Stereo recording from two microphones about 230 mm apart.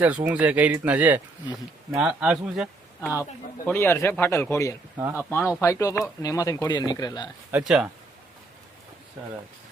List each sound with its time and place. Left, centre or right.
0.0 s speech: centre
3.0 s speech: centre
7.6 s speech: centre